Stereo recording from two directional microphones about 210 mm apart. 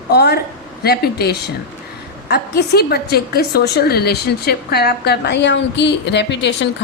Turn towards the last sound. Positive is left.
turn(degrees=55)  # may be behind; listen again after turning